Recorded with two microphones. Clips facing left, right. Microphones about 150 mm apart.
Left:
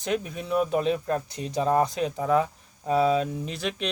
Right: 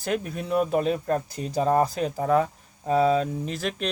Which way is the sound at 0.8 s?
40° right (ahead or behind).